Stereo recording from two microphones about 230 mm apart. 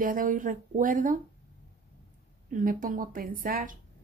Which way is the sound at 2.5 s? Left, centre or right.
Right.